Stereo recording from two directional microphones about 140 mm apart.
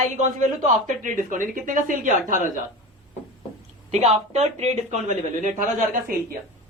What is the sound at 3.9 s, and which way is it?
Speech, 50° right (ahead or behind).